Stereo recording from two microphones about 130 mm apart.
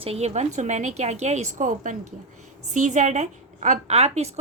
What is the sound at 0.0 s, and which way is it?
A woman's voice, 55° right (ahead or behind).